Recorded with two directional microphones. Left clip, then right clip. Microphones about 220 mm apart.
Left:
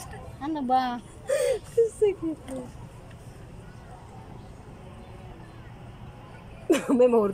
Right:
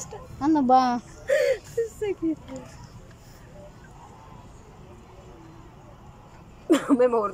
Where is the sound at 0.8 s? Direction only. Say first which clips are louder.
Right 5 dB; 5° left (ahead or behind).